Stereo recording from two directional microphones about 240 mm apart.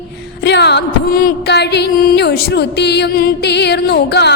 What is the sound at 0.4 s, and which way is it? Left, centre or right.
Music, left.